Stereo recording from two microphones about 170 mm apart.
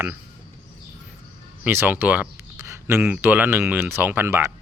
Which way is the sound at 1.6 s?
10° right (ahead or behind).